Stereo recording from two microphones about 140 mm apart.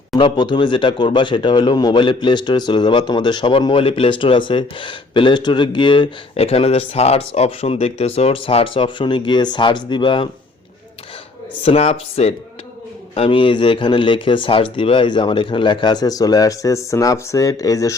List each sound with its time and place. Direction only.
0.2 s speech: 35° left (ahead or behind)
11.6 s a man's voice: 45° left (ahead or behind); by 17.9 s 25° left (ahead or behind)